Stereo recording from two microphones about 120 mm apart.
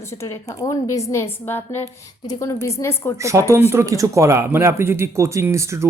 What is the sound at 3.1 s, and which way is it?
Speech, 25° right (ahead or behind).